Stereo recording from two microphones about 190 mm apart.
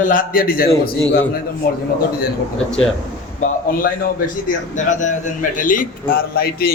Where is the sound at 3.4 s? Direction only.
50° left (ahead or behind).